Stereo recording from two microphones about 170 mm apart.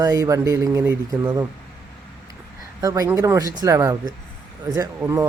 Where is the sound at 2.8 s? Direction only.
20° right (ahead or behind).